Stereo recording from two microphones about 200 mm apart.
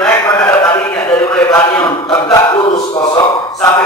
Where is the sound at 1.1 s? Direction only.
10° left (ahead or behind).